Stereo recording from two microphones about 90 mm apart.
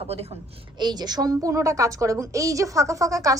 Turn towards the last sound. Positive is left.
turn(degrees=-35)  # may be behind; listen again after turning